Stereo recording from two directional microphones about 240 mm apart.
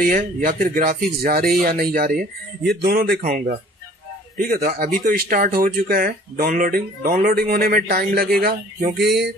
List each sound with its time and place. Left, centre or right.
0.1 s speech: right